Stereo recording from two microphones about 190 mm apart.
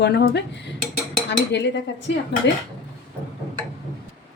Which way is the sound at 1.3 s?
65° left (ahead or behind).